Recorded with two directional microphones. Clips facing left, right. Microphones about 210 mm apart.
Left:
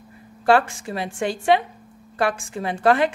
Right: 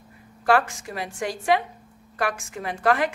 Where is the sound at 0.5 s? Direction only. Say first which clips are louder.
Left 3 dB; 30° left (ahead or behind).